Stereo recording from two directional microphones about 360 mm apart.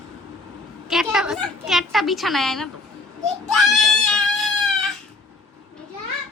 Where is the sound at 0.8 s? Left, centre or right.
Centre.